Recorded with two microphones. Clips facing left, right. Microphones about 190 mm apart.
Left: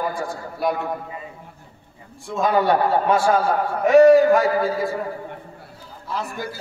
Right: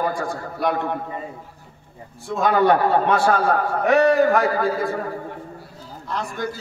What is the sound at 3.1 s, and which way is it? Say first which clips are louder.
A man's voice: even; 60° right (ahead or behind).